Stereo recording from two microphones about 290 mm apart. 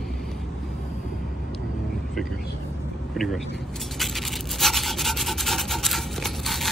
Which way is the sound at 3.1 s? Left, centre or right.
Centre.